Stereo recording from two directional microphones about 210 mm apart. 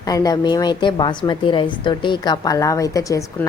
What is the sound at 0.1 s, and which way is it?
A woman's voice, 20° left (ahead or behind).